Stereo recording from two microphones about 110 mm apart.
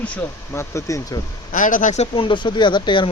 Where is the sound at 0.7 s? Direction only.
30° left (ahead or behind).